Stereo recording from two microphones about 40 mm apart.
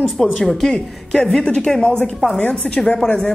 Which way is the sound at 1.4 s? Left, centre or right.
Left.